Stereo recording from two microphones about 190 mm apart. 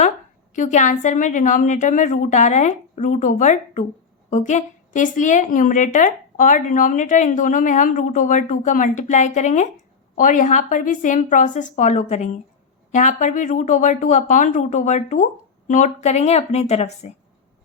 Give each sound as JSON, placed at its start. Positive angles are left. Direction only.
{"t": 0.5, "sound": "a woman's voice", "side_deg": 40}